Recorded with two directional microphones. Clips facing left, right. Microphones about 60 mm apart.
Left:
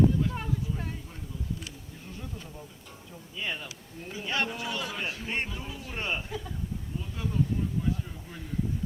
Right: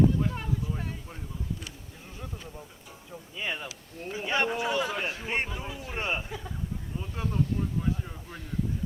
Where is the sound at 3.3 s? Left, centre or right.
Centre.